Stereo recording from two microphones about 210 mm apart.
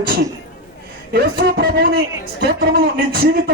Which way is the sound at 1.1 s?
50° right (ahead or behind).